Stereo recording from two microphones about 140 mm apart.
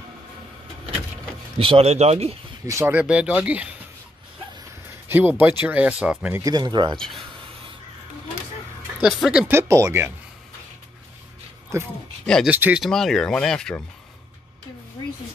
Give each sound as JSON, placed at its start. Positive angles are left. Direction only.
{"t": 1.6, "sound": "speech", "side_deg": -45}
{"t": 2.6, "sound": "speech", "side_deg": -20}
{"t": 5.0, "sound": "a sound", "side_deg": -15}
{"t": 5.4, "sound": "speech", "side_deg": -15}
{"t": 6.3, "sound": "speech", "side_deg": -25}
{"t": 9.0, "sound": "speech", "side_deg": -5}
{"t": 9.5, "sound": "speech", "side_deg": -20}
{"t": 11.7, "sound": "speech", "side_deg": -20}
{"t": 12.8, "sound": "speech", "side_deg": 5}